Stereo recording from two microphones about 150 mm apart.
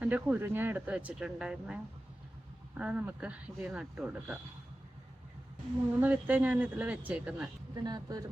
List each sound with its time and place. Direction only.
0.0 s speech: 10° right (ahead or behind)
6.0 s speech: 10° right (ahead or behind)
7.9 s speech: 25° right (ahead or behind)